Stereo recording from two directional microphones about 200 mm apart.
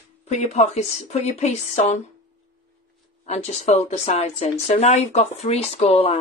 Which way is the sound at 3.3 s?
35° left (ahead or behind).